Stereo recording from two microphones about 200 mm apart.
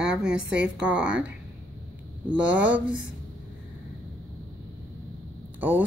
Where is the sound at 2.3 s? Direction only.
5° right (ahead or behind).